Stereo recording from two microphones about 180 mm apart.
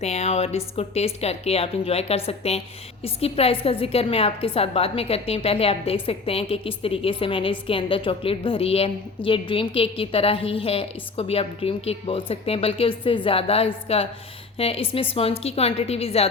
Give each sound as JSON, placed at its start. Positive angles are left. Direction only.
{"t": 0.0, "sound": "a woman's voice", "side_deg": 35}